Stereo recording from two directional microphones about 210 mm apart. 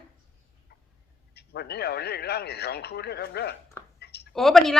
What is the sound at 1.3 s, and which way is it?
Speech, 50° left (ahead or behind).